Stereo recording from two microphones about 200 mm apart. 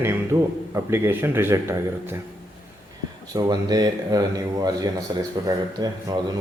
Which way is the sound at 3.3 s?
20° right (ahead or behind).